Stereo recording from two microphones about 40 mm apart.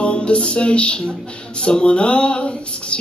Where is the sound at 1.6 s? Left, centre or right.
Left.